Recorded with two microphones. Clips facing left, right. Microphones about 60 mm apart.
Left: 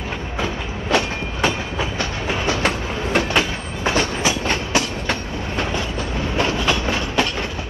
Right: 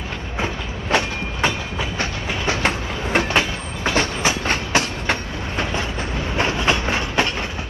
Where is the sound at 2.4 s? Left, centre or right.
Right.